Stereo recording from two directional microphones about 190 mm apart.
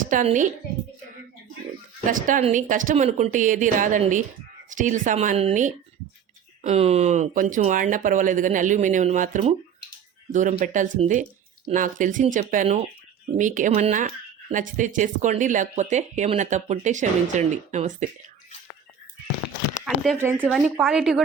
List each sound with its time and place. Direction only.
0.1 s speech: 40° right (ahead or behind)
2.0 s speech: 45° right (ahead or behind)
20.4 s speech: centre (ahead or behind)